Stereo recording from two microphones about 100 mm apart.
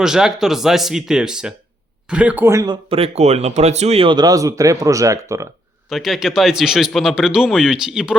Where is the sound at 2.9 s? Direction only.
85° right.